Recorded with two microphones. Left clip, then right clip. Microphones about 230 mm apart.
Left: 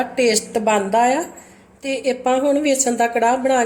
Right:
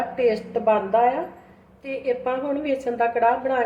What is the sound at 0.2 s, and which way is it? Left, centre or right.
A woman's voice, left.